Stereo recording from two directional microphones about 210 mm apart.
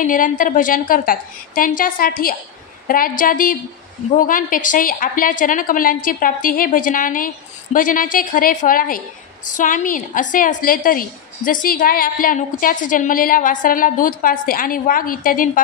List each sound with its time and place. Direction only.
0.0 s a woman's voice: 40° left (ahead or behind)